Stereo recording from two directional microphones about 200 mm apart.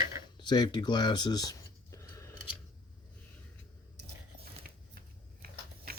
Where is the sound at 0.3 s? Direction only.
20° left (ahead or behind).